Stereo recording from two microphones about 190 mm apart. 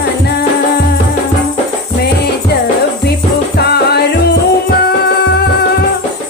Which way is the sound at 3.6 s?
60° left (ahead or behind).